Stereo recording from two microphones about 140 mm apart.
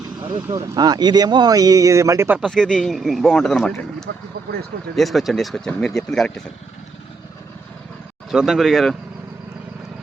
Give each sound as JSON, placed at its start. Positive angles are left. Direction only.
{"t": 0.3, "sound": "speech", "side_deg": -25}
{"t": 2.4, "sound": "speech", "side_deg": 5}
{"t": 4.9, "sound": "speech", "side_deg": 0}
{"t": 8.3, "sound": "speech", "side_deg": 0}